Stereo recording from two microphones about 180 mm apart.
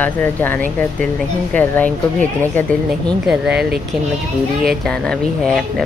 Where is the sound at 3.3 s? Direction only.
5° right (ahead or behind).